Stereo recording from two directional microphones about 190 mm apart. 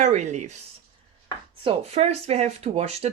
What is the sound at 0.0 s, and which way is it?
Speech, 40° right (ahead or behind).